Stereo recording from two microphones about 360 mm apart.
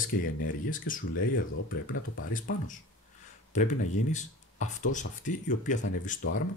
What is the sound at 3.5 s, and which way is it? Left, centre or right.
Speech, centre.